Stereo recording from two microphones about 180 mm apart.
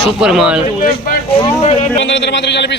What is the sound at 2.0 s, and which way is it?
Speech, 80° left.